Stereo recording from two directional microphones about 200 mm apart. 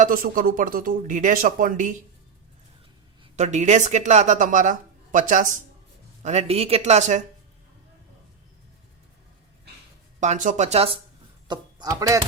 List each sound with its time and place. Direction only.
0.0 s speech: 45° right (ahead or behind)
3.3 s speech: 35° right (ahead or behind)
10.2 s speech: 40° right (ahead or behind); by 12.2 s 15° right (ahead or behind)